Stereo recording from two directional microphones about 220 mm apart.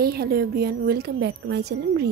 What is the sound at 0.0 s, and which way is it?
A woman's voice, 45° right (ahead or behind).